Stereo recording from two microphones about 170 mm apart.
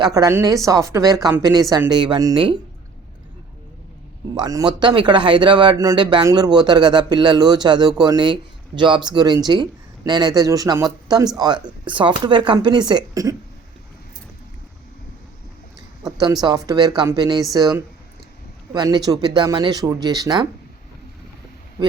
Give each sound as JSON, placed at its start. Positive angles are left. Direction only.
{"t": 0.0, "sound": "speech", "side_deg": -20}
{"t": 4.4, "sound": "speech", "side_deg": -25}
{"t": 16.0, "sound": "speech", "side_deg": -20}